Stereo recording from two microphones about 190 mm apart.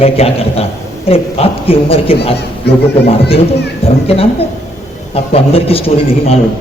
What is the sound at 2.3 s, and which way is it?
Speech, 60° left (ahead or behind).